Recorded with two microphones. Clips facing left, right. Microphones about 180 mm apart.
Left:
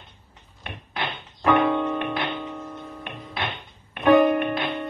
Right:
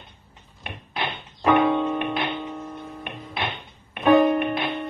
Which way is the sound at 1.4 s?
20° right (ahead or behind).